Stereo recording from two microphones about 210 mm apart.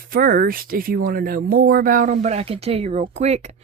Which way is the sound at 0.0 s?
45° right (ahead or behind).